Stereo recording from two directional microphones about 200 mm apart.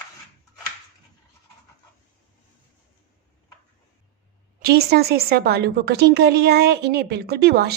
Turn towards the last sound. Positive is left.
turn(degrees=-55)  # may be behind; listen again after turning